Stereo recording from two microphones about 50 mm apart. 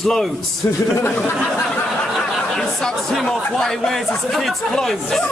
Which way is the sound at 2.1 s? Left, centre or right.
Centre.